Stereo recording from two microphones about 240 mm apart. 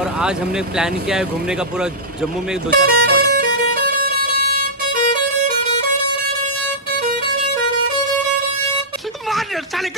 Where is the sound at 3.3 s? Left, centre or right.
Right.